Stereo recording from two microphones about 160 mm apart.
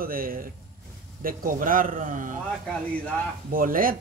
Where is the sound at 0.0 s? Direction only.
65° right (ahead or behind).